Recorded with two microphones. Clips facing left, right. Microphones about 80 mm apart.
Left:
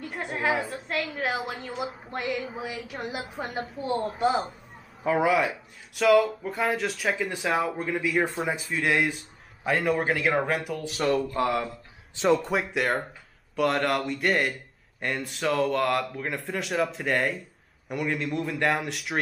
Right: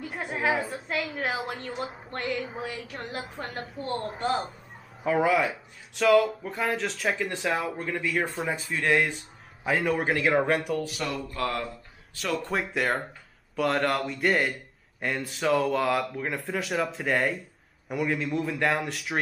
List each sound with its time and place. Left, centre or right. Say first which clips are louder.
0.0 s a woman's voice: even; centre
11.0 s a sound: left 7 dB; left
12.2 s speech: left 8 dB; left
12.4 s a man's voice: left 1 dB; centre